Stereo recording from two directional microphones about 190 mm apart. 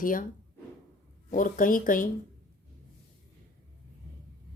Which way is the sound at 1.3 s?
45° left (ahead or behind).